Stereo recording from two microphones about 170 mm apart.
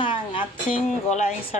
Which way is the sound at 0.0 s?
30° left (ahead or behind).